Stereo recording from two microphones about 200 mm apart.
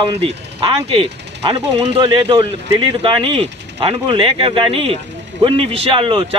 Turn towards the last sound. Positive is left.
turn(degrees=-25)  # may be behind; listen again after turning